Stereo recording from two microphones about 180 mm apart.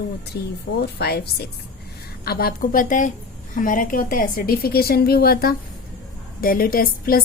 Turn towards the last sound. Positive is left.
turn(degrees=55)  # may be behind; listen again after turning